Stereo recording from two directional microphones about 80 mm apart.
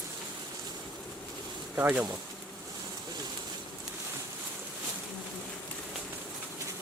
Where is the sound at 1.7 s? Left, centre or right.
Right.